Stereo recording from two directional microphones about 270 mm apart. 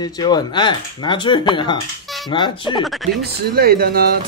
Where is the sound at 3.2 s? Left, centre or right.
Right.